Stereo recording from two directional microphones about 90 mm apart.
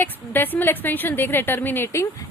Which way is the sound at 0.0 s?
20° left (ahead or behind).